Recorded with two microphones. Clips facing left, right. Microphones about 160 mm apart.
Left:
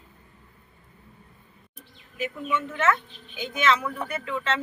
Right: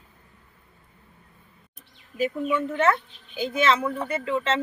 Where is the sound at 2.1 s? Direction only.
35° right (ahead or behind).